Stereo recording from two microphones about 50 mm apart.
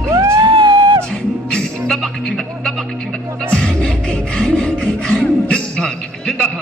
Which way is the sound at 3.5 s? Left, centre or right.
Centre.